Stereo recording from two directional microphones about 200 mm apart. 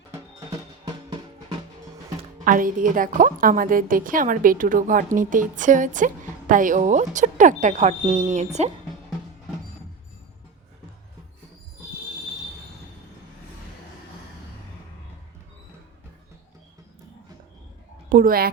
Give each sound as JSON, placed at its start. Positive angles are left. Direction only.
{"t": 2.4, "sound": "a woman's voice", "side_deg": -40}
{"t": 18.1, "sound": "a woman's voice", "side_deg": -45}